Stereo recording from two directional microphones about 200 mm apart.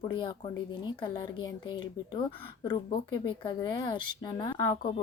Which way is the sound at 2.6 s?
20° left (ahead or behind).